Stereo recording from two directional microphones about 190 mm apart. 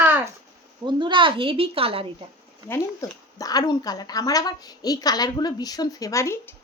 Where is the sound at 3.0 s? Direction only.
15° left (ahead or behind).